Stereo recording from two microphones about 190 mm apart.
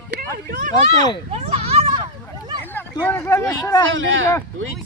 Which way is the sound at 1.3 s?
35° right (ahead or behind).